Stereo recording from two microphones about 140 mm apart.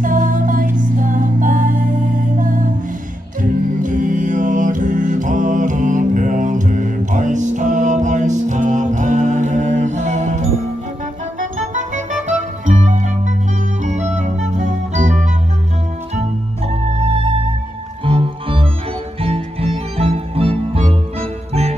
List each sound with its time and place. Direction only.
0.0 s music: 70° right (ahead or behind)
3.8 s music: 65° right (ahead or behind)
11.5 s music: 65° right (ahead or behind)
18.0 s music: 40° right (ahead or behind)